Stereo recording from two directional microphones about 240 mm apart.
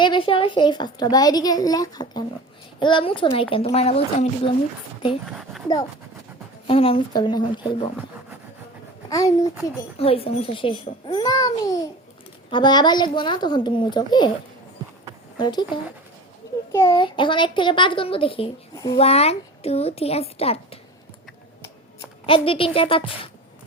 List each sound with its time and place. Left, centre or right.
0.0 s a child's voice: left
6.7 s a child's voice: left
9.0 s a child's voice: centre
15.4 s a child's voice: centre
22.3 s a child's voice: left